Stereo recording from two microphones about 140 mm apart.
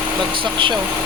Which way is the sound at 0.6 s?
35° right (ahead or behind).